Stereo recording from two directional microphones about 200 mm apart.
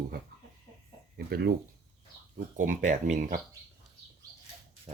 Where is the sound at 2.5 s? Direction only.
40° right (ahead or behind).